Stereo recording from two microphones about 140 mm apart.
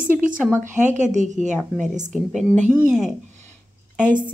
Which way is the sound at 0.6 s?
60° right (ahead or behind).